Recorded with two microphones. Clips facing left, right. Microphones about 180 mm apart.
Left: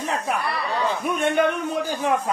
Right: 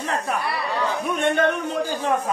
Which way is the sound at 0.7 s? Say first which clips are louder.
Left 1 dB; 15° left (ahead or behind).